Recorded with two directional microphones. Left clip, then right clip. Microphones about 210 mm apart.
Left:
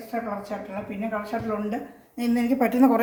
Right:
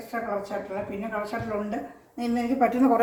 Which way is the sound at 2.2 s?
55° left (ahead or behind).